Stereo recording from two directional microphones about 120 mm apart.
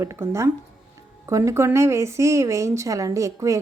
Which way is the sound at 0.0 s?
20° right (ahead or behind).